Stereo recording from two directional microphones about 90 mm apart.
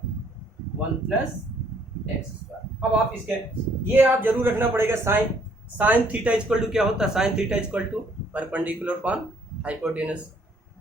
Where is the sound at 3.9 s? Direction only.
25° right (ahead or behind).